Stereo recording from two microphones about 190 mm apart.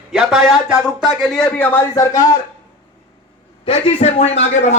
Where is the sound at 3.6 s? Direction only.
30° left (ahead or behind).